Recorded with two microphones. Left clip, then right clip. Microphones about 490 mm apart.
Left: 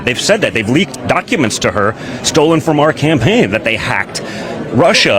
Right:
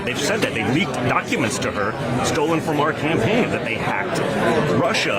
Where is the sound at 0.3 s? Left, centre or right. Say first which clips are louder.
Left 9 dB; left.